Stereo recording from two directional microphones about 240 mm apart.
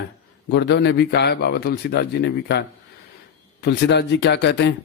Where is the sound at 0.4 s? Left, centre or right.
Left.